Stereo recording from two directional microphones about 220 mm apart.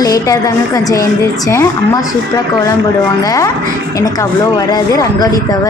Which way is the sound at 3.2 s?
15° left (ahead or behind).